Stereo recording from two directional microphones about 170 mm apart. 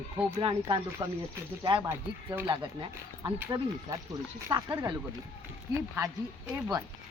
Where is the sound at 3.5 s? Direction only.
25° right (ahead or behind).